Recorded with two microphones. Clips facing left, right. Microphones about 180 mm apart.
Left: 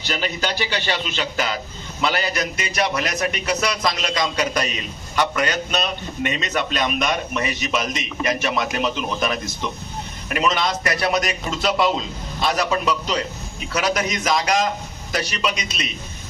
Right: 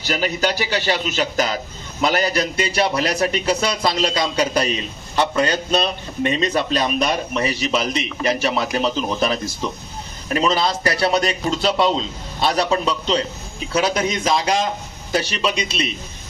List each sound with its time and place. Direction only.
0.0 s a man's voice: 40° right (ahead or behind)